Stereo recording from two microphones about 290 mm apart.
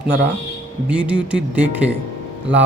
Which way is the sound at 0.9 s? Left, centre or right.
Centre.